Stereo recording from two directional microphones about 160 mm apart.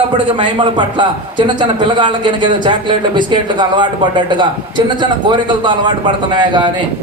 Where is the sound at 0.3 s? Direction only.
30° right (ahead or behind).